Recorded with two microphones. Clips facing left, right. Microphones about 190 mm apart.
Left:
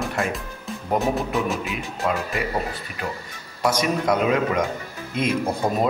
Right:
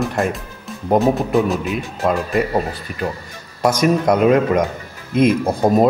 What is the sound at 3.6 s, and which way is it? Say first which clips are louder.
A man's voice: right 6 dB; 45° right (ahead or behind).